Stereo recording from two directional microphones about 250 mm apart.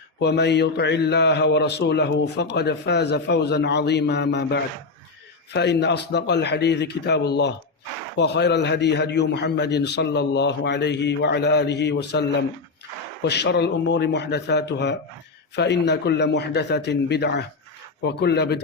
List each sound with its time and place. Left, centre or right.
0.2 s a man's voice: left